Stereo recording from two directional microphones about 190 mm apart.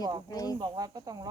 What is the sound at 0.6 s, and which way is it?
Speech, 20° right (ahead or behind).